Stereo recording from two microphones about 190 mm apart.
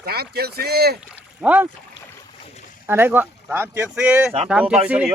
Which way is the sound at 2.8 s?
10° right (ahead or behind).